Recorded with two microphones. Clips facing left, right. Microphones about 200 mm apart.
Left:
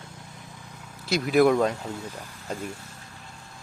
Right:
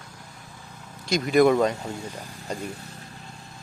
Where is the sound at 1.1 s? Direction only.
5° left (ahead or behind).